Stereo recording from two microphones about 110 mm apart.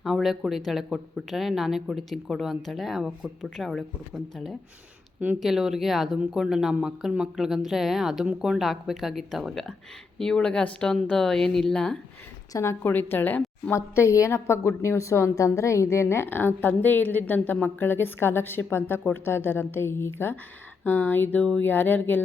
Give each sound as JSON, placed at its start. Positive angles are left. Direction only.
{"t": 0.0, "sound": "speech", "side_deg": 0}
{"t": 12.5, "sound": "a woman's voice", "side_deg": 20}